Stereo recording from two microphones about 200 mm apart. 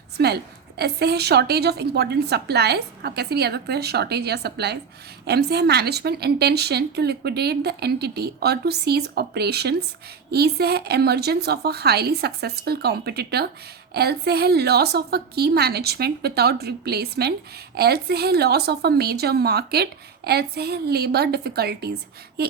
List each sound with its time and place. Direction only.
0.8 s a woman's voice: 55° right (ahead or behind)